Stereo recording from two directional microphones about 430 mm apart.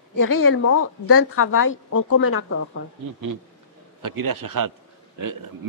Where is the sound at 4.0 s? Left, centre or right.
Right.